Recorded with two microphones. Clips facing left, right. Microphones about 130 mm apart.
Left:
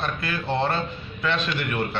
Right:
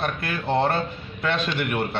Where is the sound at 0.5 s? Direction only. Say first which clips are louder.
Right 3 dB; 50° right (ahead or behind).